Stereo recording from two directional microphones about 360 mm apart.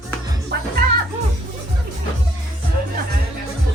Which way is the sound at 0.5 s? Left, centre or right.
Right.